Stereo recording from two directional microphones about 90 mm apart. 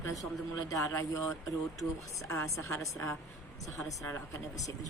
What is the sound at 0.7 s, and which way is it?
Speech, 35° left (ahead or behind).